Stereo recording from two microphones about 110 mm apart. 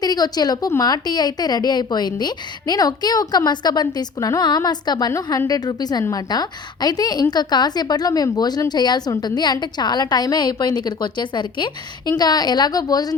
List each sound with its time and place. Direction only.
0.0 s a woman's voice: 40° left (ahead or behind)